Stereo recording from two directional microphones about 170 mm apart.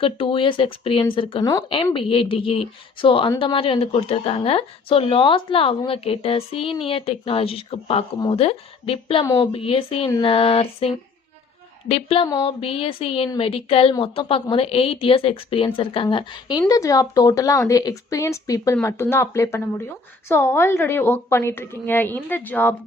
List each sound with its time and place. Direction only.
0.0 s a woman's voice: 30° left (ahead or behind); by 22.7 s 10° left (ahead or behind)